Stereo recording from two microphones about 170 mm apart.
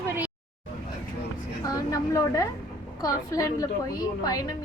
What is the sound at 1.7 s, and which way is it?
A woman's voice, 20° left (ahead or behind).